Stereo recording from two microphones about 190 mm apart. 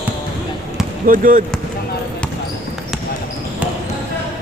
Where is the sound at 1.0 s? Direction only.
45° right (ahead or behind).